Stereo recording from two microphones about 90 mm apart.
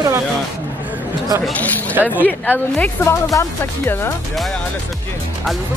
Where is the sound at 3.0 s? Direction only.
35° left (ahead or behind).